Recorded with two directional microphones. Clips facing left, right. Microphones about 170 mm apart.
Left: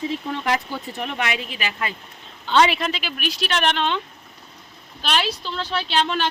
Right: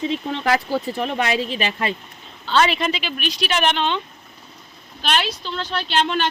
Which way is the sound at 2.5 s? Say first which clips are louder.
Left 1 dB; 15° left (ahead or behind).